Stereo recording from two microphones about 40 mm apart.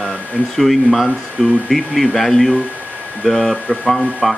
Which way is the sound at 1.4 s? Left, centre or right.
Centre.